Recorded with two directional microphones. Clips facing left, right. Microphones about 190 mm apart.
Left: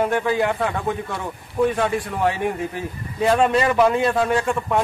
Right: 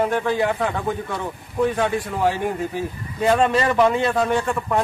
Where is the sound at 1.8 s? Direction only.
Centre (ahead or behind).